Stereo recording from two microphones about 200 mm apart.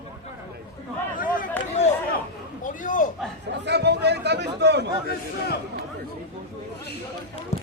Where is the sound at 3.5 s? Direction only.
60° right (ahead or behind).